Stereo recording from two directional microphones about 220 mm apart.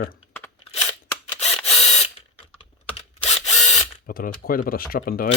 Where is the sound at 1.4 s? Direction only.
30° left (ahead or behind).